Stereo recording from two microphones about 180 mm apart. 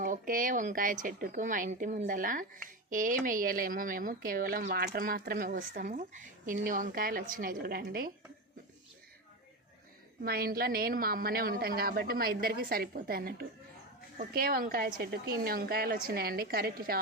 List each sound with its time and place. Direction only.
0.0 s a woman's voice: 50° right (ahead or behind)
10.2 s a woman's voice: 55° right (ahead or behind)